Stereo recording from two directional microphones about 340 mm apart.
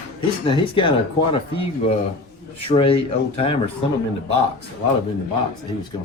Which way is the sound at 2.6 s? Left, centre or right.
Centre.